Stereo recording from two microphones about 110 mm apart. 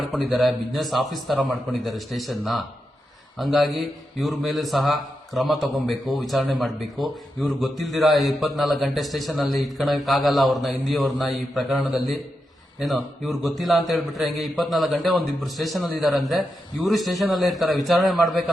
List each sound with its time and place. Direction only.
0.3 s a man's voice: centre (ahead or behind)